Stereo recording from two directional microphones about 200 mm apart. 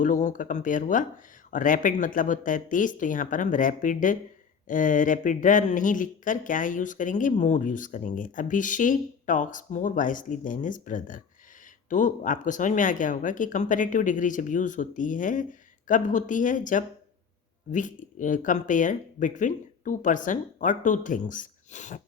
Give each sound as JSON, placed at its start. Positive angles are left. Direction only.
{"t": 0.0, "sound": "speech", "side_deg": 40}